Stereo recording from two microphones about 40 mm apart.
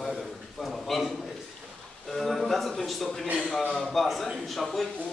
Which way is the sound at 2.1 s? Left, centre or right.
Centre.